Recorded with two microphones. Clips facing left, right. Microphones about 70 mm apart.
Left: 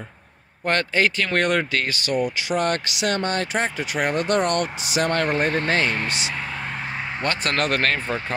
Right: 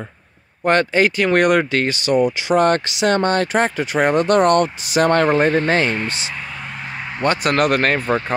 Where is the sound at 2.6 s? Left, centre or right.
Right.